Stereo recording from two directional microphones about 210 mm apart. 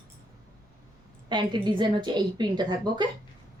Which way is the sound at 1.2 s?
20° right (ahead or behind).